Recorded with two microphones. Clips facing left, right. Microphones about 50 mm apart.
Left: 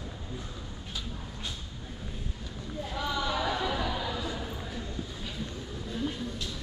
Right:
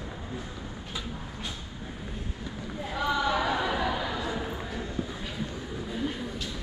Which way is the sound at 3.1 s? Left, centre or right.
Right.